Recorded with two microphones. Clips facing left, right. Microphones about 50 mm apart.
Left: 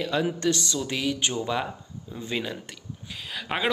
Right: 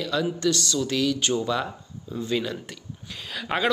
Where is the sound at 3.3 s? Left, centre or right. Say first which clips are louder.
Right 3 dB; centre.